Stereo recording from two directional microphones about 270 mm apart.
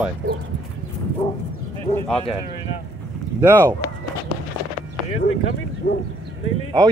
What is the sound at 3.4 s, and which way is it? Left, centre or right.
Speech, centre.